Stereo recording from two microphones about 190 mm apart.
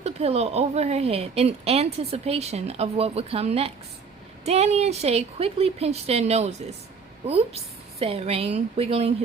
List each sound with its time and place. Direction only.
0.0 s speech: 35° right (ahead or behind)